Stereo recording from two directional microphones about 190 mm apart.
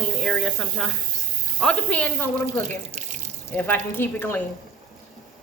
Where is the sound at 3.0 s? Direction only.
40° right (ahead or behind).